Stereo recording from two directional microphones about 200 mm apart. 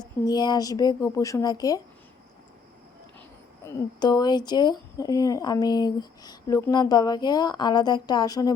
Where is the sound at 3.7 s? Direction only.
20° left (ahead or behind).